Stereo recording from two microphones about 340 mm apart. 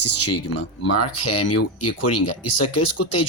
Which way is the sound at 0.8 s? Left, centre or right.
Left.